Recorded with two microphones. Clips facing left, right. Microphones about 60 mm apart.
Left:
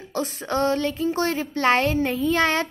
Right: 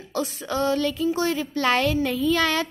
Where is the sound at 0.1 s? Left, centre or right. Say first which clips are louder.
Left 1 dB; left.